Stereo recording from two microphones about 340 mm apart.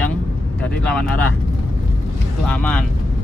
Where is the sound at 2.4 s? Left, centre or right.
Centre.